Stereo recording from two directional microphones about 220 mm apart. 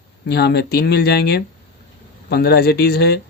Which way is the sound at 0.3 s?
50° left (ahead or behind).